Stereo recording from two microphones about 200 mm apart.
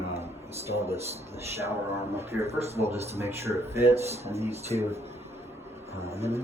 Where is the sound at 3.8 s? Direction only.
30° right (ahead or behind).